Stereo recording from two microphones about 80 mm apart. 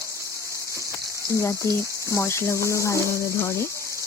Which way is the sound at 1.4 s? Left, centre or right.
Left.